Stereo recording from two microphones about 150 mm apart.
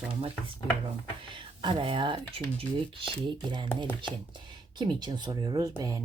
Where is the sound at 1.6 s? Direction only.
35° right (ahead or behind).